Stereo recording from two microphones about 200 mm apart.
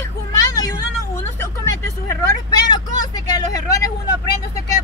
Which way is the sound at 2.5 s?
20° left (ahead or behind).